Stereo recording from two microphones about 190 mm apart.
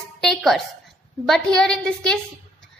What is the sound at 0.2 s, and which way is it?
A woman's voice, centre (ahead or behind).